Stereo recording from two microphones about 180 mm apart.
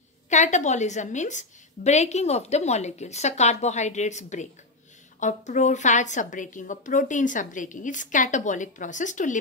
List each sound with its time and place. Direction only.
0.3 s a woman's voice: 40° left (ahead or behind)